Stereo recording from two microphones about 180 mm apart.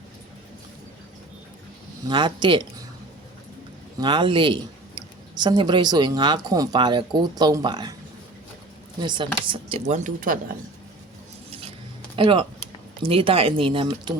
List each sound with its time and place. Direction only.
2.0 s speech: 25° right (ahead or behind)
3.9 s speech: 25° right (ahead or behind)
9.0 s speech: 25° right (ahead or behind); by 10.3 s 45° right (ahead or behind)
12.1 s speech: 30° right (ahead or behind)